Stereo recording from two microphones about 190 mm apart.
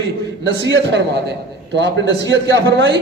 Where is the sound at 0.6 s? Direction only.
70° right (ahead or behind).